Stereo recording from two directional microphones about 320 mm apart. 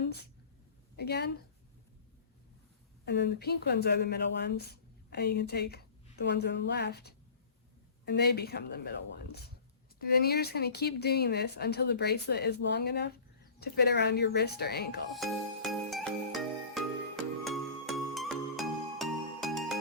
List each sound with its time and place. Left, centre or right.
0.9 s speech: left
3.1 s speech: left
15.9 s music: centre